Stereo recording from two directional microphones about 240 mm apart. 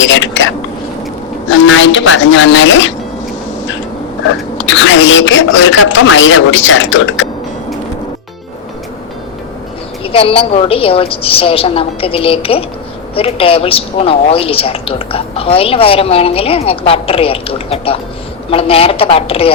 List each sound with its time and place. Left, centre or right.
0.0 s speech: left
4.5 s speech: left
10.0 s speech: left